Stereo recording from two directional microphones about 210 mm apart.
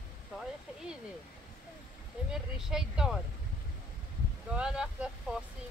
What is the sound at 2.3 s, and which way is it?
Speech, centre (ahead or behind).